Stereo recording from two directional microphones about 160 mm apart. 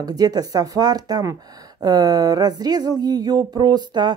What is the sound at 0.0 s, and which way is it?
A woman's voice, 25° right (ahead or behind).